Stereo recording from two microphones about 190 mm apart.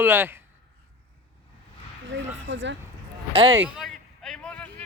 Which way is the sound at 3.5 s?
5° right (ahead or behind).